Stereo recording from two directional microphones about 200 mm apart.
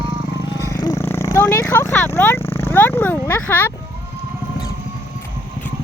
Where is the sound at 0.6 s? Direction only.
15° left (ahead or behind).